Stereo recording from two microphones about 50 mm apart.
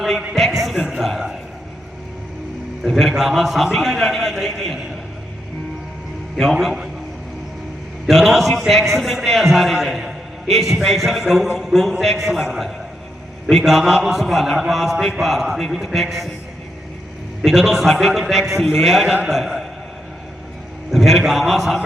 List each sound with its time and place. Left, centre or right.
0.0 s a sound: centre
2.8 s a man's voice: centre
6.3 s a man's voice: centre
8.0 s a man's voice: centre
17.4 s a man's voice: centre
20.9 s a man's voice: centre